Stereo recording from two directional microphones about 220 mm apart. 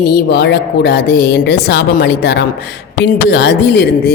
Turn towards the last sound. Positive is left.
turn(degrees=50)  # may be behind; listen again after turning